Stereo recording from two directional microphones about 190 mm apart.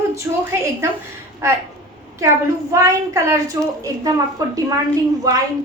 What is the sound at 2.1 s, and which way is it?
A woman's voice, 15° right (ahead or behind).